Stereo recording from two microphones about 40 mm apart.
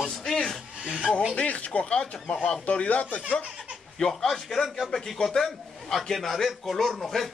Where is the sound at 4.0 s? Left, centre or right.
Centre.